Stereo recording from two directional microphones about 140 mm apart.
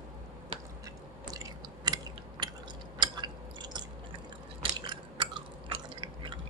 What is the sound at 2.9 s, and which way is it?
Chewing, 30° right (ahead or behind).